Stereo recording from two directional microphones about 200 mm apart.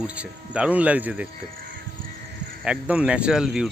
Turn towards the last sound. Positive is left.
turn(degrees=-5)  # may be behind; listen again after turning